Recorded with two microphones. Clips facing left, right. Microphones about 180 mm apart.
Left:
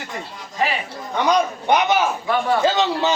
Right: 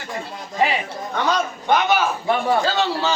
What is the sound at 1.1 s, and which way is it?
A man's voice, 15° left (ahead or behind).